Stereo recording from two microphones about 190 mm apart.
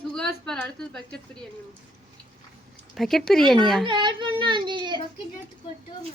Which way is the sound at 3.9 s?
25° right (ahead or behind).